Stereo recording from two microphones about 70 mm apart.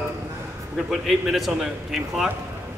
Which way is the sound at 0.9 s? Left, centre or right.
Centre.